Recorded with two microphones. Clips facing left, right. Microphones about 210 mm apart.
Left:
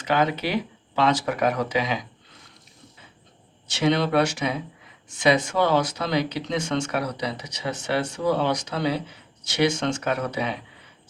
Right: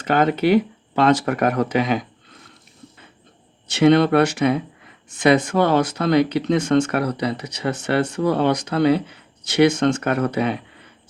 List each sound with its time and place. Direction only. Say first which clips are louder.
0.0 s speech: right 5 dB; 50° right (ahead or behind)
3.7 s speech: right 8 dB; 55° right (ahead or behind)